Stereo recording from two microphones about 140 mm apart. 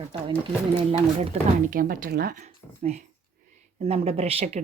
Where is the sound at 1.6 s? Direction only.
85° right.